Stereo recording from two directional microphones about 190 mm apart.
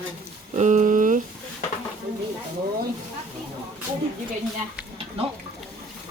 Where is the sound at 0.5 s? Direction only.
40° right (ahead or behind).